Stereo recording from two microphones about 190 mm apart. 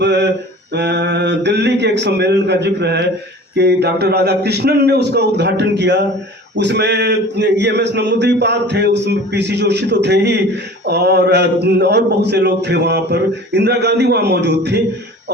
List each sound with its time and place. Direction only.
0.0 s mantra: 65° right (ahead or behind)
0.7 s a man's voice: 65° right (ahead or behind)